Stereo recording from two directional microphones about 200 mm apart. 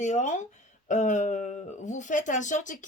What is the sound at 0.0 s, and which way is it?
Speech, 35° left (ahead or behind).